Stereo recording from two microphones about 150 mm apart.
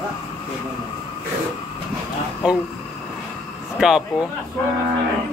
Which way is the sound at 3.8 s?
5° right (ahead or behind).